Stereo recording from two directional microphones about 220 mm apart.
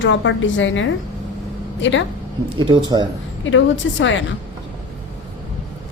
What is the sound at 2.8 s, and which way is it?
Speech, 20° right (ahead or behind).